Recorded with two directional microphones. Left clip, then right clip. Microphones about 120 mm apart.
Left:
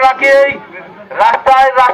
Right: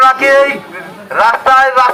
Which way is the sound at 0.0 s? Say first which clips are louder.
Even; 15° right (ahead or behind).